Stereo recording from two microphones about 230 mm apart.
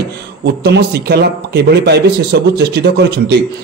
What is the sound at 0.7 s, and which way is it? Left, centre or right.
A man's voice, right.